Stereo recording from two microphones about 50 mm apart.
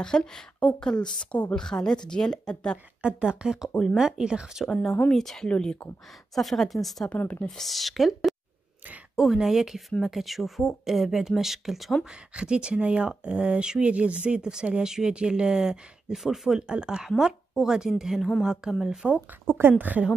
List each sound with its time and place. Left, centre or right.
0.0 s speech: centre
1.5 s speech: centre
3.0 s speech: centre
5.1 s speech: centre
6.3 s speech: centre
12.0 s speech: centre
19.4 s a woman's voice: right